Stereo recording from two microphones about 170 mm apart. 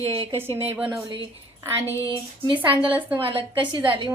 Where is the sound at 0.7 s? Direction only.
10° right (ahead or behind).